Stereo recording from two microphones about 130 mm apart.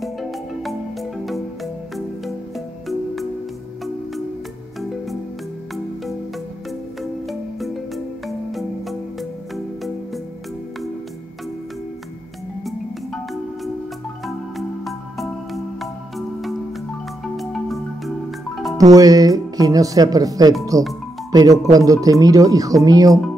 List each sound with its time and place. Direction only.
0.0 s music: centre (ahead or behind)
7.0 s music: centre (ahead or behind)
12.6 s marimba: centre (ahead or behind)
14.9 s music: centre (ahead or behind)
18.8 s speech: 30° right (ahead or behind)